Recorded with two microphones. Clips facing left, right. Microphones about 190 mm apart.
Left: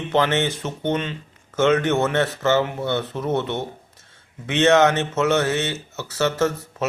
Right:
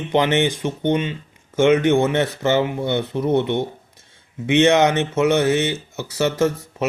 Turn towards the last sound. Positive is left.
turn(degrees=-10)  # may be behind; listen again after turning